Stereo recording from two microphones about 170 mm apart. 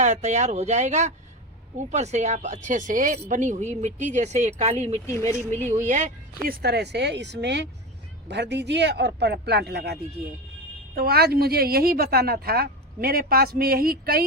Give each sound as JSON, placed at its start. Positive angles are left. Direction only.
{"t": 0.0, "sound": "speech", "side_deg": -40}
{"t": 5.0, "sound": "speech", "side_deg": 15}
{"t": 6.4, "sound": "speech", "side_deg": -65}